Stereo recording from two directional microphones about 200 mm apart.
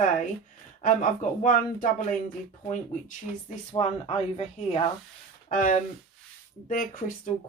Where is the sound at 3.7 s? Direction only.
30° left (ahead or behind).